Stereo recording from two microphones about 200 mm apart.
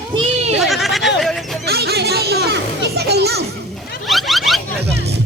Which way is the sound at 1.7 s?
55° right (ahead or behind).